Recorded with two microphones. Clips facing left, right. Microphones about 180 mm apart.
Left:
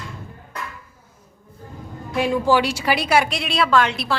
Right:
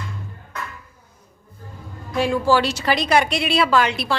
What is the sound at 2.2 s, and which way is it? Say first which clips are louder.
A woman's voice: even; 15° left (ahead or behind).